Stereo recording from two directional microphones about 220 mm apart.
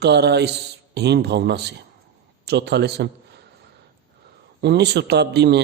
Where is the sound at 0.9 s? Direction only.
50° right (ahead or behind).